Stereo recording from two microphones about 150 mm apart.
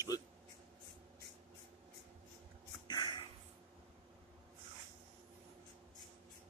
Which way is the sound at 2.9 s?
30° left (ahead or behind).